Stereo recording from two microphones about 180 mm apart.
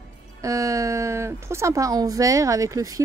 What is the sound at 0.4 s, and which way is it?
Speech, 15° right (ahead or behind).